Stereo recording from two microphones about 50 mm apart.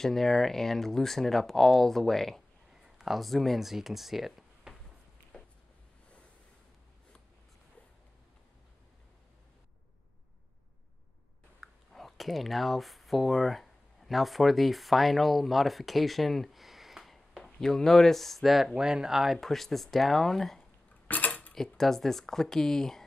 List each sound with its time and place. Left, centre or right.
0.0 s speech: centre
2.7 s speech: centre
11.6 s speech: centre
18.8 s speech: centre
21.1 s a sound: left
21.7 s speech: centre